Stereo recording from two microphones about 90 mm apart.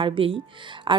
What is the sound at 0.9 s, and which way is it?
Speech, 60° right (ahead or behind).